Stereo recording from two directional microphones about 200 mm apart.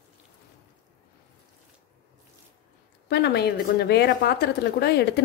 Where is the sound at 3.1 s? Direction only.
55° left (ahead or behind).